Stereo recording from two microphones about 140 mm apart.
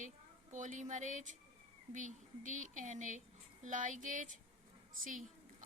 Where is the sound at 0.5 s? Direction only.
65° right (ahead or behind).